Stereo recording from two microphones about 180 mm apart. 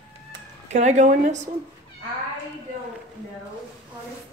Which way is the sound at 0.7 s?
40° right (ahead or behind).